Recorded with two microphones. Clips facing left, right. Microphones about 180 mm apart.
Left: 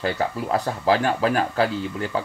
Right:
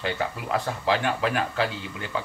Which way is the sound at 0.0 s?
40° left (ahead or behind).